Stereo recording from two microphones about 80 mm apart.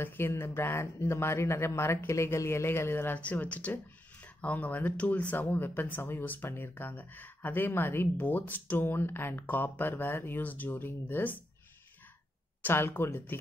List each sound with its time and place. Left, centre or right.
0.0 s speech: left
12.6 s speech: left